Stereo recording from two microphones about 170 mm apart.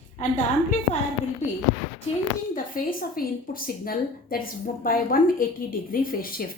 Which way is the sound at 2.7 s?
55° left (ahead or behind).